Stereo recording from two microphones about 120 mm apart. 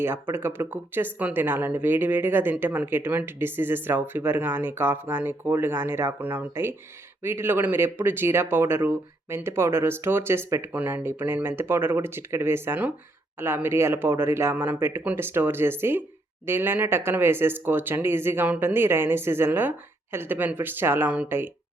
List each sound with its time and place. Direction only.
0.0 s speech: 20° right (ahead or behind)